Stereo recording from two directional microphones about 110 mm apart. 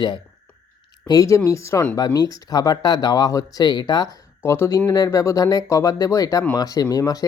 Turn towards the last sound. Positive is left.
turn(degrees=35)  # may be behind; listen again after turning